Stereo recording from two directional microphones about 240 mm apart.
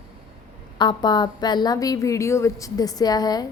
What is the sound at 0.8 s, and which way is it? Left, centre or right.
A woman's voice, centre.